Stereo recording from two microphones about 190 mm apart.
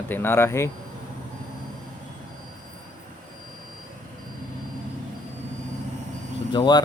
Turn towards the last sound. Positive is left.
turn(degrees=25)  # may be behind; listen again after turning